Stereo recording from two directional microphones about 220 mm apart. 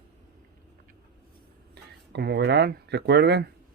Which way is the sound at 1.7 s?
50° right (ahead or behind).